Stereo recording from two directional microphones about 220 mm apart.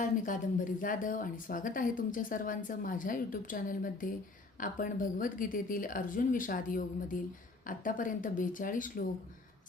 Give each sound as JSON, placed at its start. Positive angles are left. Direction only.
{"t": 0.0, "sound": "speech", "side_deg": 35}